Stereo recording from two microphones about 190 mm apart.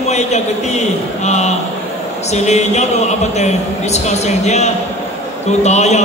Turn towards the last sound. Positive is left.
turn(degrees=35)  # may be behind; listen again after turning